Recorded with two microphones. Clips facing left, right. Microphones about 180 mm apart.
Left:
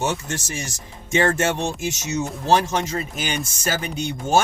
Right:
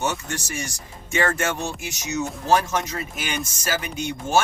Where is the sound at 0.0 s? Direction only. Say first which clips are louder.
Left 2 dB; 25° left (ahead or behind).